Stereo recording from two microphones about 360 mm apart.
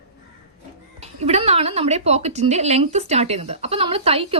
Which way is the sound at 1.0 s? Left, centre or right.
Centre.